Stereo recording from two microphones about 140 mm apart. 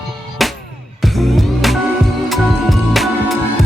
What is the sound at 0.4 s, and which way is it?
Music, centre (ahead or behind).